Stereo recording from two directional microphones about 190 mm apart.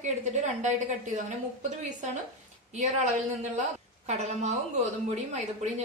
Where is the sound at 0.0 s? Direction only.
40° right (ahead or behind).